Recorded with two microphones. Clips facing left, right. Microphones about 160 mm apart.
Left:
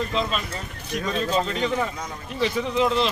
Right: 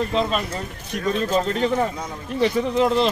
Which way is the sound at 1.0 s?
50° right (ahead or behind).